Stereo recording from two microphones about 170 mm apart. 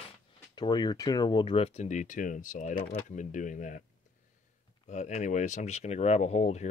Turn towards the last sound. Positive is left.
turn(degrees=40)  # may be behind; listen again after turning